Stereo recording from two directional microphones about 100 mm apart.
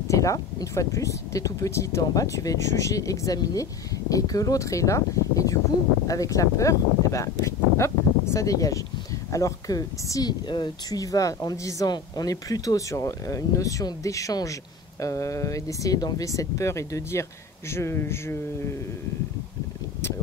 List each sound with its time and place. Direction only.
0.1 s speech: 35° left (ahead or behind)
10.5 s speech: 50° left (ahead or behind)
11.0 s speech: 35° left (ahead or behind)